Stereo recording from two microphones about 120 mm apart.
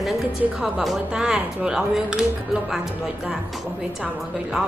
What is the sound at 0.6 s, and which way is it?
A woman's voice, 5° right (ahead or behind).